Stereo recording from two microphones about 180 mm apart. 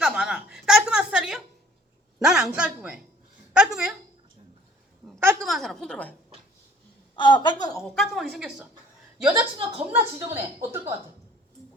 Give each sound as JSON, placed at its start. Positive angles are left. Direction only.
{"t": 0.0, "sound": "a sound", "side_deg": -5}
{"t": 2.1, "sound": "speech", "side_deg": -5}
{"t": 5.4, "sound": "speech", "side_deg": 0}
{"t": 7.2, "sound": "a woman's voice", "side_deg": 25}
{"t": 7.9, "sound": "speech", "side_deg": 0}
{"t": 9.6, "sound": "a woman's voice", "side_deg": -35}
{"t": 10.2, "sound": "a woman's voice", "side_deg": -10}